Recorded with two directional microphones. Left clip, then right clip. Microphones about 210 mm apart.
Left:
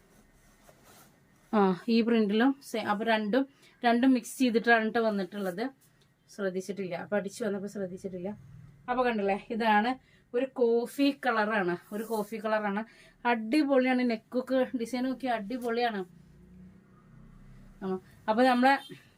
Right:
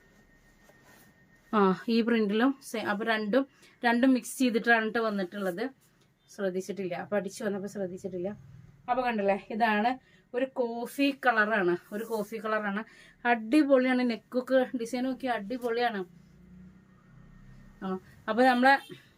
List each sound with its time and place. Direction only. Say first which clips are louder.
1.5 s speech: right 1 dB; 15° right (ahead or behind)
8.9 s a woman's voice: right 1 dB; 15° right (ahead or behind)
17.7 s speech: left 1 dB; 20° right (ahead or behind)